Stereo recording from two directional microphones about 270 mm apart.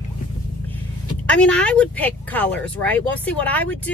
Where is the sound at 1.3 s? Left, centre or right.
Centre.